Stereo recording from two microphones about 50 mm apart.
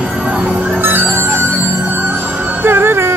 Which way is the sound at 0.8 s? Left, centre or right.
Right.